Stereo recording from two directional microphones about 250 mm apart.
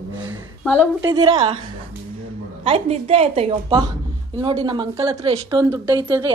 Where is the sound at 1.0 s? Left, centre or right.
Centre.